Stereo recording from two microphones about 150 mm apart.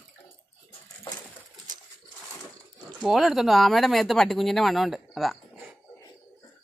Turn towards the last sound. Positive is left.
turn(degrees=0)  # may be behind; listen again after turning